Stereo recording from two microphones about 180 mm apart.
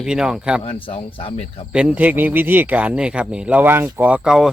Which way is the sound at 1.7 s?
5° right (ahead or behind).